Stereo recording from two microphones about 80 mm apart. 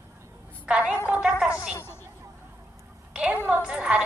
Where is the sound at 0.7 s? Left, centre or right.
Centre.